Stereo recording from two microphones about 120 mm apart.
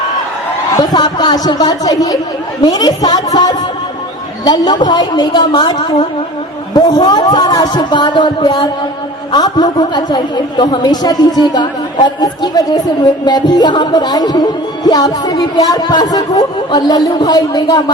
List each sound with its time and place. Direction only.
0.8 s speech: 35° left (ahead or behind)